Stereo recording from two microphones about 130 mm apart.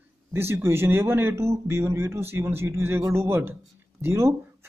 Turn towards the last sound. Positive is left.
turn(degrees=-20)  # may be behind; listen again after turning